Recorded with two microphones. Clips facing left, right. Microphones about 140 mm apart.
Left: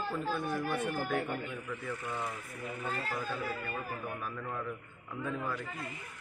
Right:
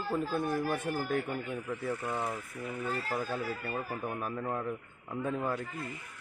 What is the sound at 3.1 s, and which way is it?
A man's voice, 40° right (ahead or behind).